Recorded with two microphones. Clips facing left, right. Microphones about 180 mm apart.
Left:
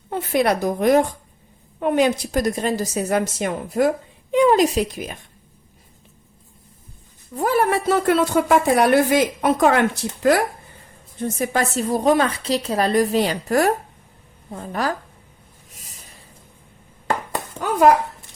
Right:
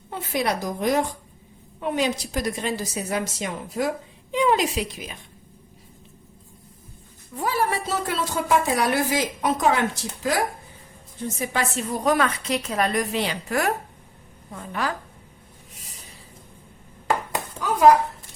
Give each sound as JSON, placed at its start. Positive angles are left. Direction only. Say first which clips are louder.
{"t": 0.1, "sound": "a woman's voice", "louder": "left 6 dB", "side_deg": 55}
{"t": 7.3, "sound": "speech", "louder": "left 6 dB", "side_deg": 50}
{"t": 11.2, "sound": "a woman's voice", "louder": "left 5 dB", "side_deg": 50}